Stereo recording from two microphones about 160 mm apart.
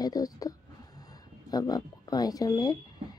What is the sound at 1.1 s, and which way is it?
A woman's voice, 25° left (ahead or behind).